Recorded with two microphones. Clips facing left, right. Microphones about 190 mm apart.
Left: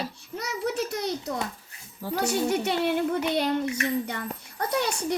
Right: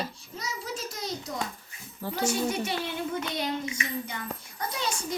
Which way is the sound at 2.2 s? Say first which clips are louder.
Left 3 dB; 65° left (ahead or behind).